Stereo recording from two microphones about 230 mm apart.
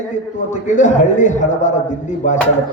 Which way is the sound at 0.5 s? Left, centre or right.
Left.